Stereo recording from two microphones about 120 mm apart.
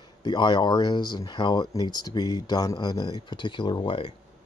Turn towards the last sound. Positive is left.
turn(degrees=45)  # may be behind; listen again after turning